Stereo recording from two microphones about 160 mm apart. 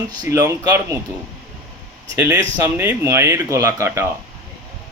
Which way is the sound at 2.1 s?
15° right (ahead or behind).